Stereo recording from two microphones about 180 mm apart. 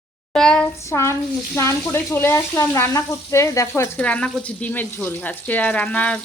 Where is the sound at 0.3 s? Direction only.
5° left (ahead or behind).